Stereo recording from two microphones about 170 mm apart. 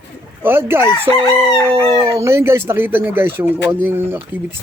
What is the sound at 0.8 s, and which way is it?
Chicken, 20° left (ahead or behind).